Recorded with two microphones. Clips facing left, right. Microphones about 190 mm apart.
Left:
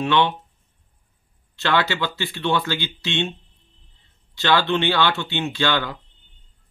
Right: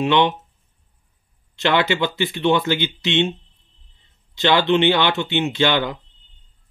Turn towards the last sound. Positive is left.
turn(degrees=-20)  # may be behind; listen again after turning